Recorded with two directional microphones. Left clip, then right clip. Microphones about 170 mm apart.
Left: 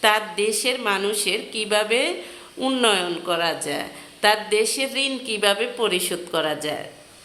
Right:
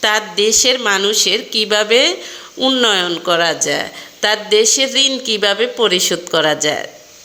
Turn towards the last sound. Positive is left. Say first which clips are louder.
# right 9 dB
turn(degrees=-25)  # may be behind; listen again after turning